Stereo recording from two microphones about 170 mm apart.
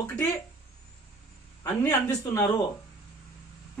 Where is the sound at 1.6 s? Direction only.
20° left (ahead or behind).